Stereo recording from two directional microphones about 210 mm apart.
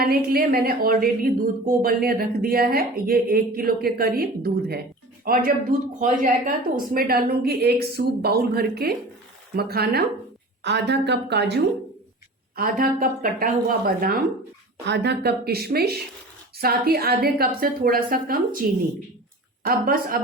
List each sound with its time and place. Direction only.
0.0 s a woman's voice: 45° right (ahead or behind)
12.5 s speech: 40° right (ahead or behind)
19.6 s speech: 45° right (ahead or behind)